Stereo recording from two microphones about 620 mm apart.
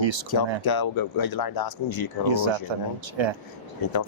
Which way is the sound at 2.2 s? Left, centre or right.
Right.